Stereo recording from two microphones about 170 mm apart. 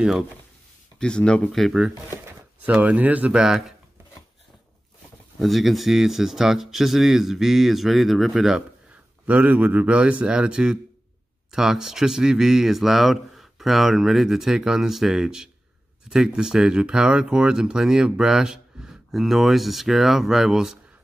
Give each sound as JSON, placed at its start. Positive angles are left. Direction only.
{"t": 0.9, "sound": "speech", "side_deg": 5}
{"t": 5.4, "sound": "a man's voice", "side_deg": 0}